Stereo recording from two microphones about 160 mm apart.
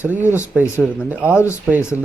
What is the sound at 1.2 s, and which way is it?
Speech, 10° right (ahead or behind).